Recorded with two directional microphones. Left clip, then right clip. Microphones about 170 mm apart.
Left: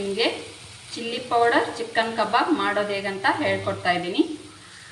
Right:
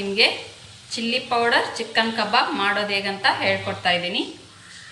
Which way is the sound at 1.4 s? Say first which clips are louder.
Right 1 dB; 20° left (ahead or behind).